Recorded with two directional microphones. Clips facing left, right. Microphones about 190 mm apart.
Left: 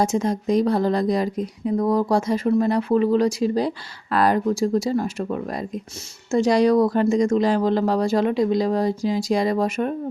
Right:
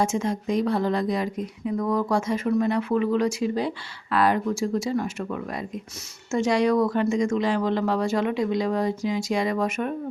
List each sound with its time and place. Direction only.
0.0 s a woman's voice: 35° left (ahead or behind)